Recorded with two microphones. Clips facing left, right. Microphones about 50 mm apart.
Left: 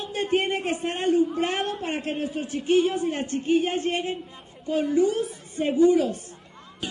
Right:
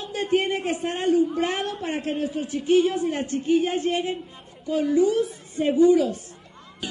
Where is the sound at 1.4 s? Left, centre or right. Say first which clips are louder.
Even; left.